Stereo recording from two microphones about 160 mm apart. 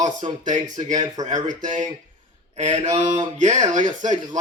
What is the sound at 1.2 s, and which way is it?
Speech, 20° right (ahead or behind).